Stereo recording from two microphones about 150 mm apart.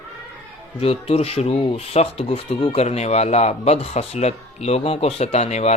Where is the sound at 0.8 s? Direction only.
40° left (ahead or behind).